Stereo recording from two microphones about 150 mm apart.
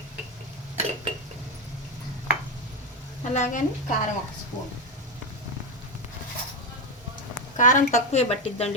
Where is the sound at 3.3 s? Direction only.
55° left (ahead or behind).